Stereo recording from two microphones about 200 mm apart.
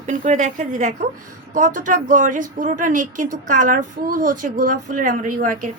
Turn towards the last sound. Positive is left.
turn(degrees=-40)  # may be behind; listen again after turning